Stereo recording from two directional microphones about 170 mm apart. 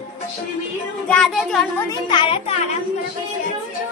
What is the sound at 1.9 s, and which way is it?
Speech, 30° left (ahead or behind).